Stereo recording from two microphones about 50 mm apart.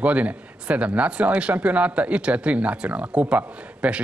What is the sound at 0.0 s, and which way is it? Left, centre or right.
Speech, right.